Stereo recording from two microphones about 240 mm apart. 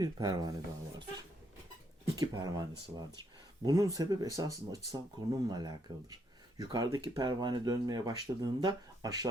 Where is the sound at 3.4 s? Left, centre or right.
Centre.